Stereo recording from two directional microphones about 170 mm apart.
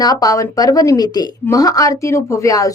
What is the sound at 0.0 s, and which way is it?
Speech, 20° left (ahead or behind).